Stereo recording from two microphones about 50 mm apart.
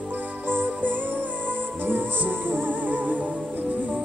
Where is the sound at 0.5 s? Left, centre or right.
Right.